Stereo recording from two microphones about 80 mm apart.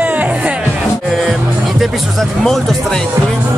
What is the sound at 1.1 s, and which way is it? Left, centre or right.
Music, centre.